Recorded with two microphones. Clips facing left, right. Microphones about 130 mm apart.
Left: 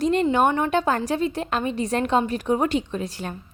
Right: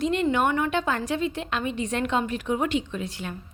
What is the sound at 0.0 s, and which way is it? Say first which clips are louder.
A woman's voice: left 4 dB; 40° left (ahead or behind).